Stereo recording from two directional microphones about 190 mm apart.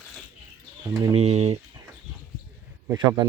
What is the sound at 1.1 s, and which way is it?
Speech, 35° right (ahead or behind).